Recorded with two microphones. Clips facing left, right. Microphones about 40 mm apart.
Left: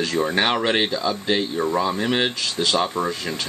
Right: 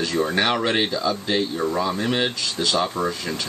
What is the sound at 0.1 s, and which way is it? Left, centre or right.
Speech, centre.